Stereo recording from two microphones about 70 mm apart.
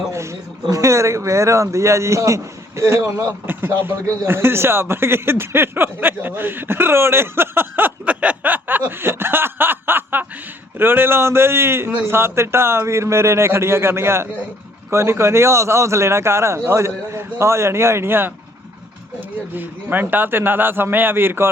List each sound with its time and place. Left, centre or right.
0.1 s a man's voice: right
3.4 s speech: right
19.5 s speech: right